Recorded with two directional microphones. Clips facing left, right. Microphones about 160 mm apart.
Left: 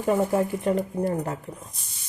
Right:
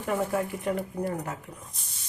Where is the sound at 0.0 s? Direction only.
25° left (ahead or behind).